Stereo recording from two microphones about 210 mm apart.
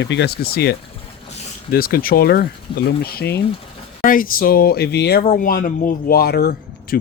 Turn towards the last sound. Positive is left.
turn(degrees=50)  # may be behind; listen again after turning